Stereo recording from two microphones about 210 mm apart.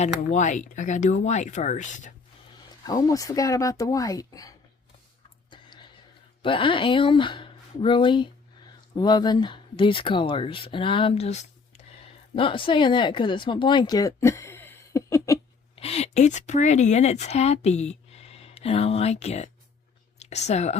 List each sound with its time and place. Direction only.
0.0 s speech: 35° left (ahead or behind)
2.8 s speech: 15° left (ahead or behind)
5.5 s whispering: 20° left (ahead or behind)
6.4 s speech: 25° left (ahead or behind)
15.7 s speech: 30° left (ahead or behind)